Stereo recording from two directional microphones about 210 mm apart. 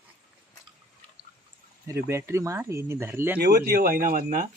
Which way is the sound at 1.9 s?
15° right (ahead or behind).